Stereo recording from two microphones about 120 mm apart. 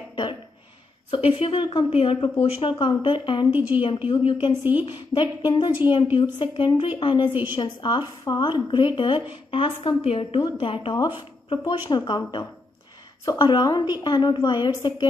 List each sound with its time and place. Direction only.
0.1 s a sound: 40° left (ahead or behind)
1.1 s speech: 45° left (ahead or behind)
3.4 s a woman's voice: 15° right (ahead or behind)
4.1 s a woman's voice: 45° left (ahead or behind)